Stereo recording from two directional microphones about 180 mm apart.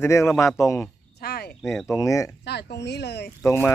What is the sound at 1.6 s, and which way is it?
Speech, centre (ahead or behind).